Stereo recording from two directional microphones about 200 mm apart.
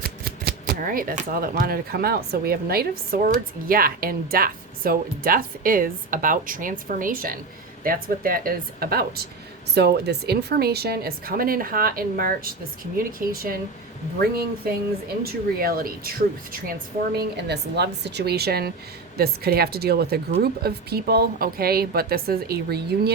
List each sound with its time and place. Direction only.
0.0 s speech: 50° right (ahead or behind)
17.2 s a woman's voice: 55° right (ahead or behind)